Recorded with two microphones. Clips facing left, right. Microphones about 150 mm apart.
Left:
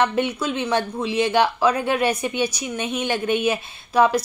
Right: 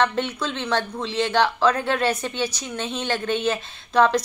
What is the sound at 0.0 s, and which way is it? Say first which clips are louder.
A woman's voice: left 2 dB; 10° left (ahead or behind).